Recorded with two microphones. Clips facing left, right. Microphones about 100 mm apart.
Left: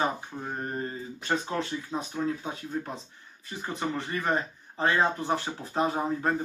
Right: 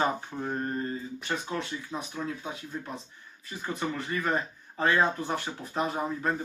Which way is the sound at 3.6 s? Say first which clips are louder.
Even; 30° left (ahead or behind).